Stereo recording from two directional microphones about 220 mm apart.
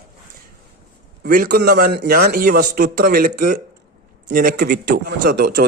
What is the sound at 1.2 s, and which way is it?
A man's voice, 45° right (ahead or behind).